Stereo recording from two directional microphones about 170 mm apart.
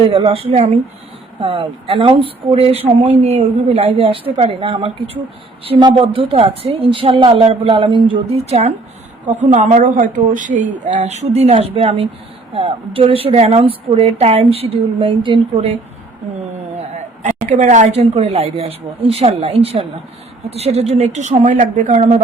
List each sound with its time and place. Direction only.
0.1 s a woman's voice: 35° right (ahead or behind)
16.7 s a woman's voice: 45° right (ahead or behind)